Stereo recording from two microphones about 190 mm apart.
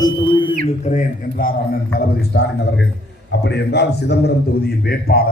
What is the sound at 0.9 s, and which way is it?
A man's voice, 45° left (ahead or behind).